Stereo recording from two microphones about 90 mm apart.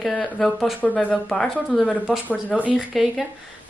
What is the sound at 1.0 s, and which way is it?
Speech, 10° left (ahead or behind).